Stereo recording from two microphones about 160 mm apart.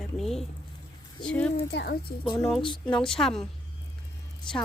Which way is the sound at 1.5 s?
85° left.